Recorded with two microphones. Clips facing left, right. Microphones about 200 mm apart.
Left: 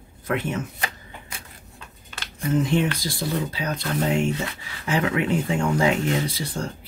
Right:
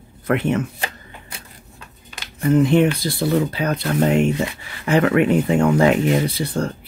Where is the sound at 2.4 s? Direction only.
60° right (ahead or behind).